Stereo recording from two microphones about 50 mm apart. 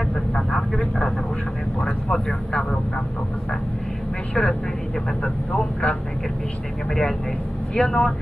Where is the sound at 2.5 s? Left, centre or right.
Left.